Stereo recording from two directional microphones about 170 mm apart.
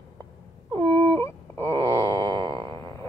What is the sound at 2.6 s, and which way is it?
Music, 20° left (ahead or behind).